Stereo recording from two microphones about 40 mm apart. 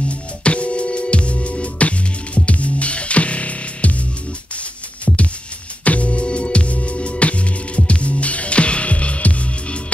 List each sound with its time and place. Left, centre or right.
0.1 s music: left
5.0 s music: left